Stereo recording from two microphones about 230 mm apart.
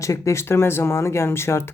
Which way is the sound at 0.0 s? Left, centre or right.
Centre.